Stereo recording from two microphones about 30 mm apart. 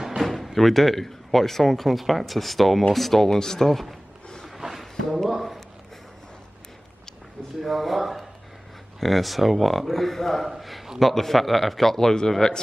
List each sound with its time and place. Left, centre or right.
0.2 s speech: centre
3.3 s speech: centre
3.6 s speech: centre
5.3 s a sound: centre
7.6 s speech: centre
10.5 s a sound: centre
11.0 s speech: centre